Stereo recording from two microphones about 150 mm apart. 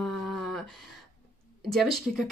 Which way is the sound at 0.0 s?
Centre (ahead or behind).